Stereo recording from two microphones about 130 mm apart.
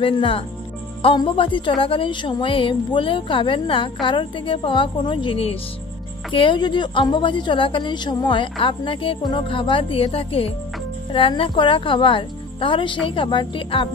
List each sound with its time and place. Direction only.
0.0 s a woman's voice: 45° left (ahead or behind)